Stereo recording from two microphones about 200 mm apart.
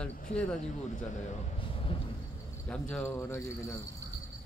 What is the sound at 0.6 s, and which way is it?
Speech, 35° left (ahead or behind).